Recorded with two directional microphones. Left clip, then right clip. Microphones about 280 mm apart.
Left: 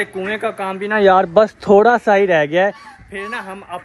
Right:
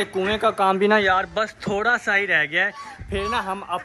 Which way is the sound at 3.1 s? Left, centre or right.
Centre.